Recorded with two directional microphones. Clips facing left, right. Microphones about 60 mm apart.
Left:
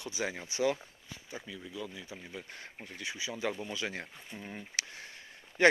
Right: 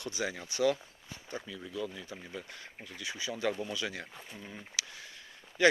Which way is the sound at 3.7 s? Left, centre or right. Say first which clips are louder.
Even; left.